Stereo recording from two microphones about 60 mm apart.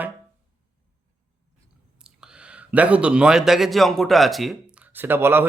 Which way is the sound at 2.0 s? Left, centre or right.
Centre.